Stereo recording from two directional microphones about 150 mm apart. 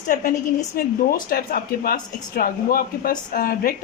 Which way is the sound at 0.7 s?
85° left.